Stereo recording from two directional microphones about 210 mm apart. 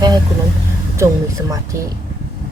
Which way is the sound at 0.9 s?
15° right (ahead or behind).